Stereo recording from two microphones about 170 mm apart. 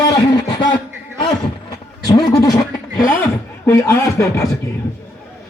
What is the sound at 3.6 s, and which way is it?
Speech, 20° left (ahead or behind).